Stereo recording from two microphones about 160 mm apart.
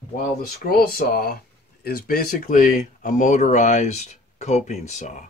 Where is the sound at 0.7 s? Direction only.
70° left (ahead or behind).